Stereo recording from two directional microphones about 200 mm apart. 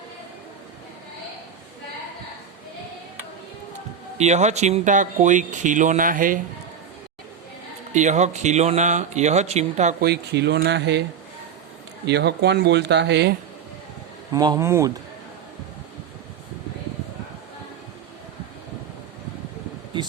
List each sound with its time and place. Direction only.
4.2 s speech: 35° right (ahead or behind)
7.9 s speech: 35° right (ahead or behind)
10.0 s speech: 55° right (ahead or behind)
12.0 s speech: 55° right (ahead or behind)
14.3 s speech: 20° right (ahead or behind)